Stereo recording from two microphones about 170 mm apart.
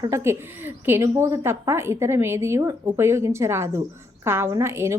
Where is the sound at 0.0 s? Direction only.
15° right (ahead or behind).